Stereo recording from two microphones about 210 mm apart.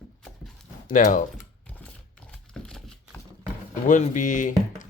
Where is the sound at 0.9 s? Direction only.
40° left (ahead or behind).